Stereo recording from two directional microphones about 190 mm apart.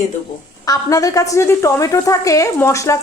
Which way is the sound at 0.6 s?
20° left (ahead or behind).